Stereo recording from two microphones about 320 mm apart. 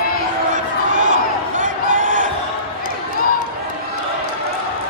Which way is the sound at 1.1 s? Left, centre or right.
Right.